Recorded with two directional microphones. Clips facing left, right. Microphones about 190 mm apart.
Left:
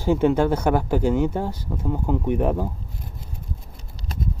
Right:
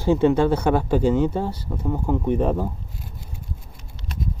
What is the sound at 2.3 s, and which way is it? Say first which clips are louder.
Speech: right 1 dB; 15° left (ahead or behind).